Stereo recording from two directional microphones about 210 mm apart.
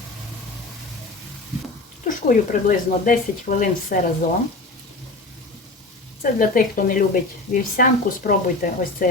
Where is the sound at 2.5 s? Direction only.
40° left (ahead or behind).